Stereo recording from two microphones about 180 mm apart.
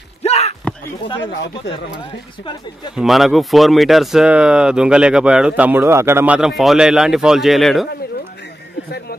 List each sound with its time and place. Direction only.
0.2 s a sound: 35° left (ahead or behind)
1.0 s speech: 30° left (ahead or behind)
3.0 s speech: centre (ahead or behind)